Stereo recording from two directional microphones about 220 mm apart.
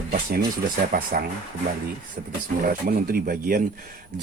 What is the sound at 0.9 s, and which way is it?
Speech, 40° right (ahead or behind).